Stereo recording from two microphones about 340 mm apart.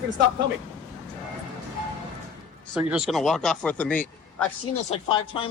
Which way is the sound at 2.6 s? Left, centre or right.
Centre.